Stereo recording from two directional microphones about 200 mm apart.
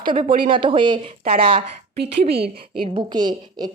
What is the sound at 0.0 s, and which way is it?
A woman's voice, 25° right (ahead or behind).